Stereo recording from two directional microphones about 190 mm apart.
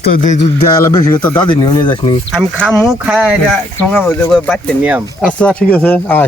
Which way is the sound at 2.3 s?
Centre (ahead or behind).